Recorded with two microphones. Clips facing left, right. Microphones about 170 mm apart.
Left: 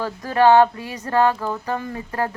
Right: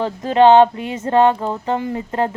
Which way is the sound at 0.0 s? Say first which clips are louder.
Right 4 dB; 20° right (ahead or behind).